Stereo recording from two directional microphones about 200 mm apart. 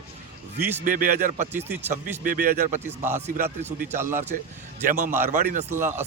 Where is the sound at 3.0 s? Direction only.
10° right (ahead or behind).